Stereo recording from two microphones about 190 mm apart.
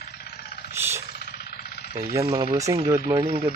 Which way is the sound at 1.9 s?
15° right (ahead or behind).